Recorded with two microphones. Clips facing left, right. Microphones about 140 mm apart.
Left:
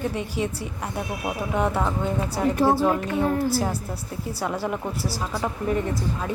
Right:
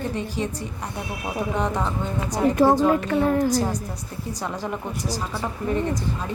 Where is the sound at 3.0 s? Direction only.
90° right.